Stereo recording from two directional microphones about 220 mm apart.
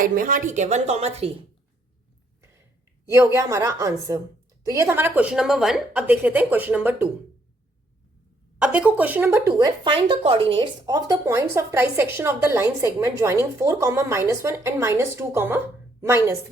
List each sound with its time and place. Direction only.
0.0 s a woman's voice: 40° right (ahead or behind)
3.1 s speech: 15° right (ahead or behind)
8.5 s speech: 5° right (ahead or behind)